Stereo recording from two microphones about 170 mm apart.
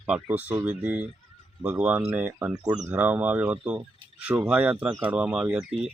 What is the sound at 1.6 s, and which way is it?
Speech, 5° right (ahead or behind).